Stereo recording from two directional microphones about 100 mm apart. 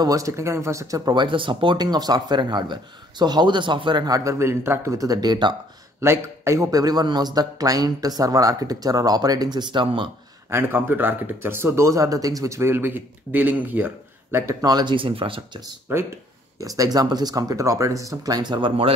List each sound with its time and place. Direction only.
0.0 s speech: 35° right (ahead or behind)
1.1 s speech: 55° right (ahead or behind)
4.1 s speech: 30° right (ahead or behind)
5.9 s speech: 30° right (ahead or behind); by 10.0 s 50° right (ahead or behind)
10.5 s speech: 20° right (ahead or behind)
14.6 s speech: 40° right (ahead or behind); by 15.6 s 65° right (ahead or behind)
15.9 s speech: 20° right (ahead or behind)
16.5 s speech: 35° right (ahead or behind)